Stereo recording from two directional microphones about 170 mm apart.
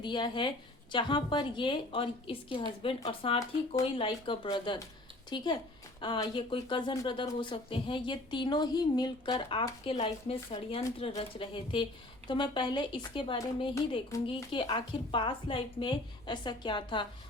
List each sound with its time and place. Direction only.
0.0 s speech: 25° left (ahead or behind)